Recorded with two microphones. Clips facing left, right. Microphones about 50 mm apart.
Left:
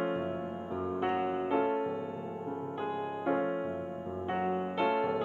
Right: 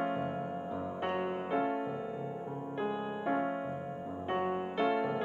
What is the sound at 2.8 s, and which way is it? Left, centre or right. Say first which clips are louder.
Music: left 2 dB; centre.